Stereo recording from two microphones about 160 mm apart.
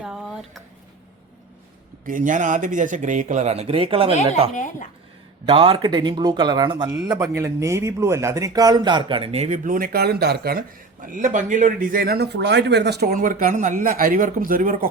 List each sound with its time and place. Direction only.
0.0 s a sound: 5° right (ahead or behind)
2.0 s speech: 55° right (ahead or behind); by 4.1 s 35° right (ahead or behind)
4.5 s speech: 50° left (ahead or behind)
5.5 s speech: 35° right (ahead or behind); by 10.6 s 75° right (ahead or behind)
11.0 s a man's voice: 55° right (ahead or behind)